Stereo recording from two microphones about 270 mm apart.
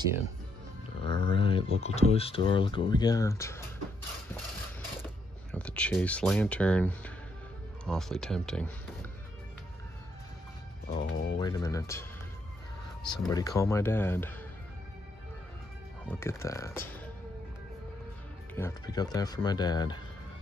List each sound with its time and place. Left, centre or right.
1.0 s speech: centre
5.5 s speech: centre
10.9 s a sound: centre
13.0 s speech: centre
16.1 s speech: centre
18.5 s speech: centre